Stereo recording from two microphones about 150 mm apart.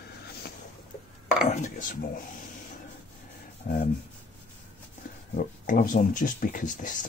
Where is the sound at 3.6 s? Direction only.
70° left (ahead or behind).